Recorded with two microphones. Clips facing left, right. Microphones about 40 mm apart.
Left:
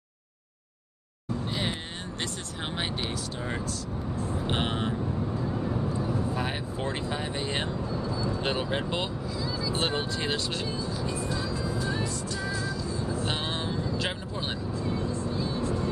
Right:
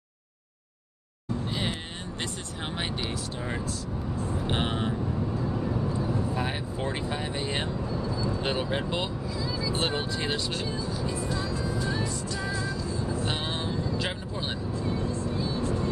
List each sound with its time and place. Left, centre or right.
2.6 s speech: centre
6.3 s speech: centre
9.3 s vehicle: right
9.7 s speech: centre
12.0 s music: centre
12.4 s music: right
13.2 s vehicle: centre
14.9 s vehicle: right